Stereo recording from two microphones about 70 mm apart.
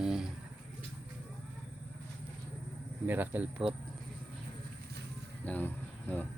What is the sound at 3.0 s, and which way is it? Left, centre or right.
Speech, right.